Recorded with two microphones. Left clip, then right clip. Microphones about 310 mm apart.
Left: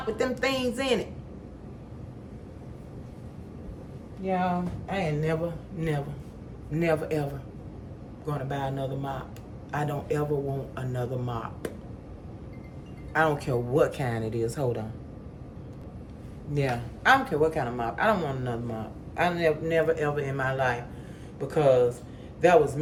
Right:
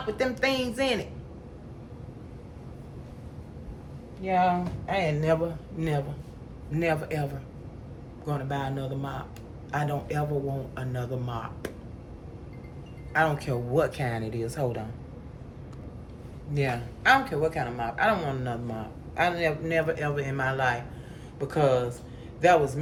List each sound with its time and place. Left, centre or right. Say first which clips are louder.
0.2 s a man's voice: right 1 dB; centre
4.3 s speech: right 4 dB; right
6.7 s a man's voice: left 1 dB; centre
13.1 s a man's voice: left 1 dB; centre
16.5 s a man's voice: left 1 dB; centre